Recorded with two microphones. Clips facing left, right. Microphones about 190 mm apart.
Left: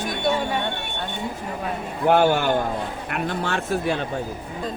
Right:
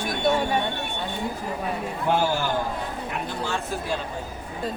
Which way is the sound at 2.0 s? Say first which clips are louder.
Left 6 dB; 65° left (ahead or behind).